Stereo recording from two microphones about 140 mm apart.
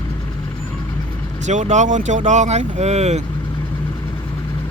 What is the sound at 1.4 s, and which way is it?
Speech, 60° right (ahead or behind).